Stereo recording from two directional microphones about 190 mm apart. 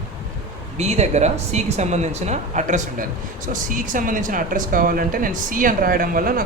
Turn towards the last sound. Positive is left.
turn(degrees=-50)  # may be behind; listen again after turning